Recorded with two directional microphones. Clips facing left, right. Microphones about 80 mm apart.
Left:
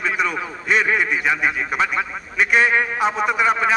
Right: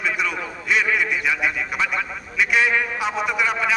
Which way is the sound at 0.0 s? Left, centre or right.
Left.